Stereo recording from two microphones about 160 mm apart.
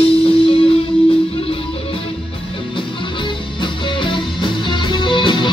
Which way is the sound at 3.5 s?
30° left (ahead or behind).